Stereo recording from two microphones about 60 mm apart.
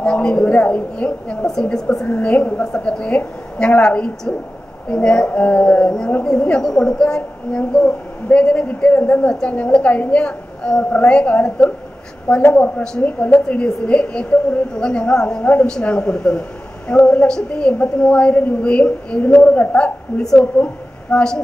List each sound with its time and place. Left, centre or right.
0.0 s a woman's voice: centre
2.1 s a woman's voice: left
2.6 s a woman's voice: centre